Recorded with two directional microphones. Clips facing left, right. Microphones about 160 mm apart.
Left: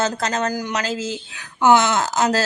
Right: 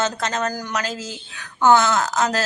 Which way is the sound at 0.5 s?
20° left (ahead or behind).